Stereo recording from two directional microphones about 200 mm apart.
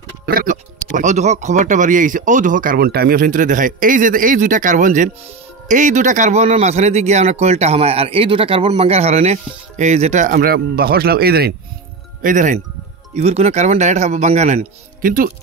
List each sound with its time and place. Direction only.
0.3 s a man's voice: 45° right (ahead or behind)